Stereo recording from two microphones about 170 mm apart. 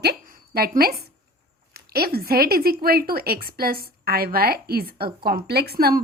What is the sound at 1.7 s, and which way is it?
A woman's voice, 65° right (ahead or behind).